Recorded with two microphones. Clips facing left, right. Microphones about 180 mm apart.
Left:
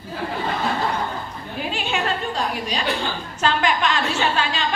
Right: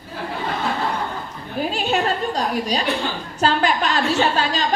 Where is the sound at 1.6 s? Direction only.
40° right (ahead or behind).